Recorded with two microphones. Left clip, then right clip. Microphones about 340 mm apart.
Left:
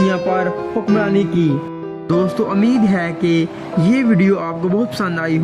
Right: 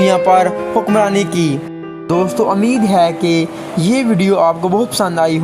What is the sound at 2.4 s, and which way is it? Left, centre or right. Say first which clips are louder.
Speech: right 6 dB; right.